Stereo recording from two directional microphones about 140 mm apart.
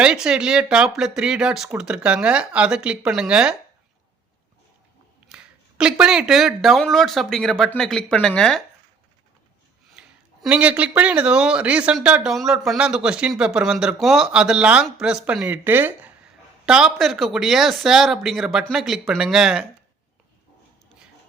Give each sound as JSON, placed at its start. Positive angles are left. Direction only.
{"t": 0.0, "sound": "speech", "side_deg": -5}
{"t": 5.3, "sound": "speech", "side_deg": -5}
{"t": 10.0, "sound": "a sound", "side_deg": -5}
{"t": 10.4, "sound": "speech", "side_deg": -10}